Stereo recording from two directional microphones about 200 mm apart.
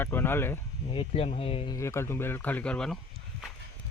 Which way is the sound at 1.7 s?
15° left (ahead or behind).